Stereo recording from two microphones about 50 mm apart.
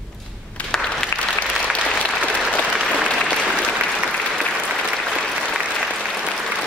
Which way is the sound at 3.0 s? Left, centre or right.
Right.